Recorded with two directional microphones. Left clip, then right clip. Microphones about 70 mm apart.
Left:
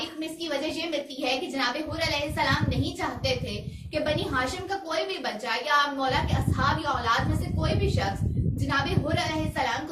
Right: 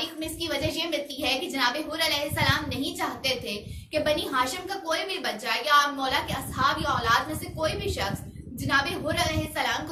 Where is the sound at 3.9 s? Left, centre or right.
Right.